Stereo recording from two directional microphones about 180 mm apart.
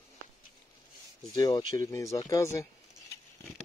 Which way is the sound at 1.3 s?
20° left (ahead or behind).